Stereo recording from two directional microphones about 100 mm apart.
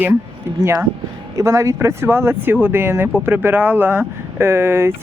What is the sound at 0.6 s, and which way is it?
Speech, 30° right (ahead or behind).